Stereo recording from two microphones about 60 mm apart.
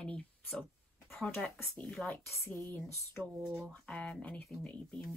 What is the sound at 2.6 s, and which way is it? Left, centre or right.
Speech, left.